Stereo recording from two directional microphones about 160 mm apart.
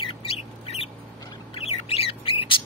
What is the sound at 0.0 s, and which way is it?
Bird, 35° left (ahead or behind).